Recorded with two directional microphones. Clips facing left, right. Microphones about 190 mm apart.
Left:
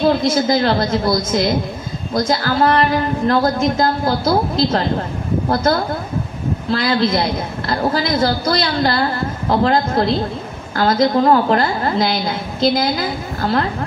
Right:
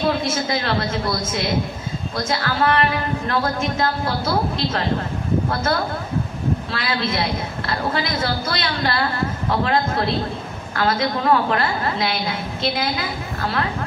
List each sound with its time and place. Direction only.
0.3 s a woman's voice: 35° left (ahead or behind)